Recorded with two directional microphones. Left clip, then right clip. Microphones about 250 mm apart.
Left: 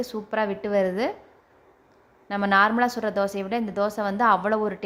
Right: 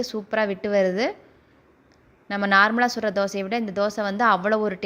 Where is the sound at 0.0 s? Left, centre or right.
Centre.